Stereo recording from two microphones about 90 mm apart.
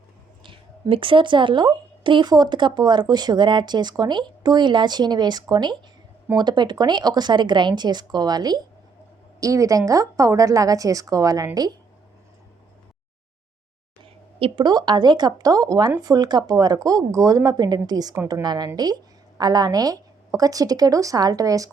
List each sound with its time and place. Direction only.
0.4 s a woman's voice: 75° right (ahead or behind); by 11.7 s 45° right (ahead or behind)
14.0 s a sound: 90° right
14.6 s a woman's voice: 50° right (ahead or behind)